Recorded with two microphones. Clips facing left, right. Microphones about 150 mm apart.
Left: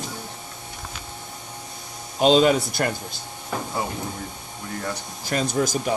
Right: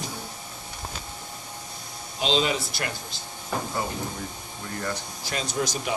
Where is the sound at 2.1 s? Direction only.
50° left (ahead or behind).